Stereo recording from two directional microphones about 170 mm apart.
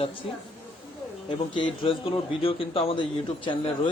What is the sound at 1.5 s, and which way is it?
A man's voice, 30° left (ahead or behind).